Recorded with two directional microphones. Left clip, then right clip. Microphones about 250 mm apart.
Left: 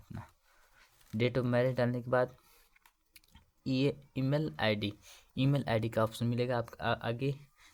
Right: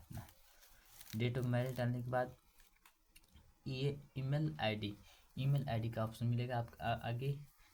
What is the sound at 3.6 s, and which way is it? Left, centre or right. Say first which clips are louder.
Speech: left 10 dB; left.